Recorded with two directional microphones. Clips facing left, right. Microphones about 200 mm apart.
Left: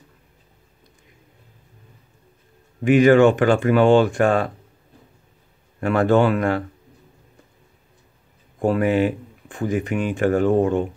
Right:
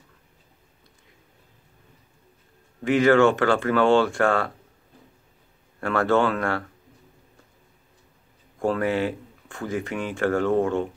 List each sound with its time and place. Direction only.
2.8 s speech: 15° left (ahead or behind)
5.8 s speech: 15° left (ahead or behind)
8.5 s speech: 15° left (ahead or behind)